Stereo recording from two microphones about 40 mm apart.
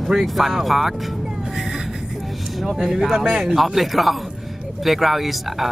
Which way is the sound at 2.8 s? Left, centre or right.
Centre.